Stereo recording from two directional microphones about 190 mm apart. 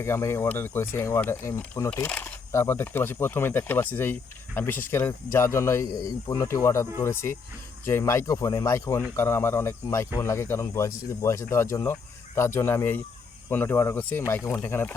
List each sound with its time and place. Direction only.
0.0 s speech: 15° left (ahead or behind)